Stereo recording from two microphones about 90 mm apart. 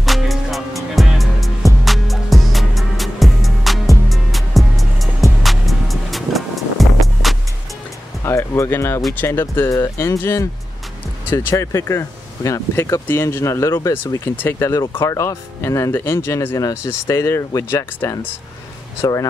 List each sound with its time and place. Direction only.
0.0 s music: centre (ahead or behind)
8.2 s music: 30° left (ahead or behind)
9.1 s speech: 25° left (ahead or behind)
19.0 s speech: 45° left (ahead or behind)